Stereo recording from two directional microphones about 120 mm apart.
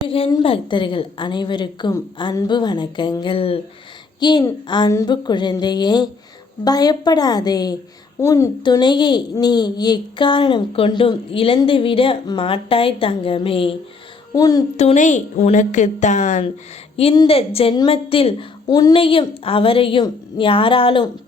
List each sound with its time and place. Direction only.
0.4 s a woman's voice: 45° left (ahead or behind)
4.2 s a woman's voice: 35° left (ahead or behind)
8.6 s a woman's voice: 40° left (ahead or behind)
14.3 s a woman's voice: 30° left (ahead or behind)
14.8 s a woman's voice: 80° left
17.2 s a woman's voice: 50° left (ahead or behind)
18.7 s a woman's voice: 30° left (ahead or behind)
18.9 s a woman's voice: 50° left (ahead or behind)